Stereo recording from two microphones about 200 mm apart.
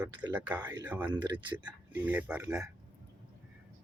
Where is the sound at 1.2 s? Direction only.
20° right (ahead or behind).